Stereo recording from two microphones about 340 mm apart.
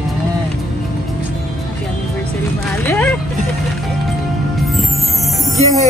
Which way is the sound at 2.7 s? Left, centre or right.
Centre.